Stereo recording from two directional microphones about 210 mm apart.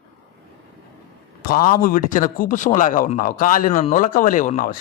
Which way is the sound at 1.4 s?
40° left (ahead or behind).